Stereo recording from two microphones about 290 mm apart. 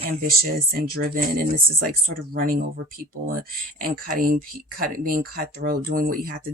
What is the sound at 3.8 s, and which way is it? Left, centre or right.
Speech, right.